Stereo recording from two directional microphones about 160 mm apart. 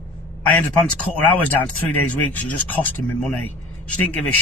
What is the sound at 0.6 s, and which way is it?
Speech, 10° left (ahead or behind).